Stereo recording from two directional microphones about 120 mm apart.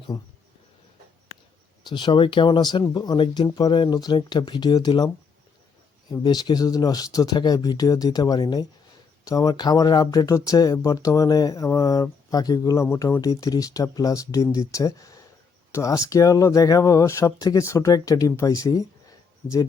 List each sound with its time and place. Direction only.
1.8 s speech: 40° left (ahead or behind)
6.2 s speech: 35° left (ahead or behind)